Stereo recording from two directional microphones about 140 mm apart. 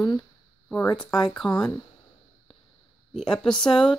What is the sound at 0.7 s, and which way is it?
Speech, 15° left (ahead or behind).